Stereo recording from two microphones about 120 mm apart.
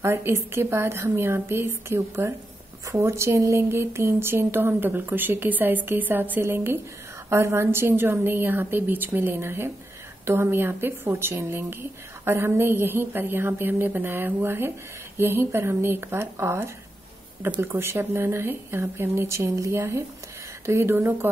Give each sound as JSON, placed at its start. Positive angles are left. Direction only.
{"t": 0.0, "sound": "a woman's voice", "side_deg": -20}